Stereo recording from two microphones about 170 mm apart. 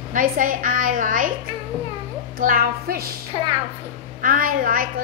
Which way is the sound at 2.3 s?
60° right (ahead or behind).